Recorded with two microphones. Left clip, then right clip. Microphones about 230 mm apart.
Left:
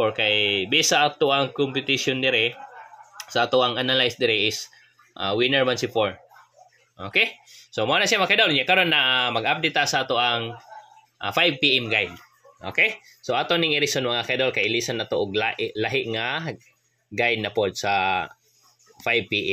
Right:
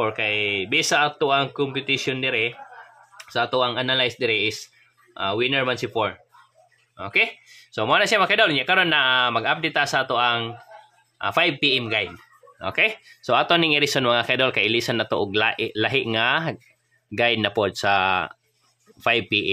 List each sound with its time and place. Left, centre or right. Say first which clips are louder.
0.0 s speech: left 2 dB; centre